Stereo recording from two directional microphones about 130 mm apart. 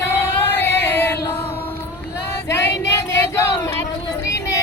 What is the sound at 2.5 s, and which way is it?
Child singing, 20° left (ahead or behind).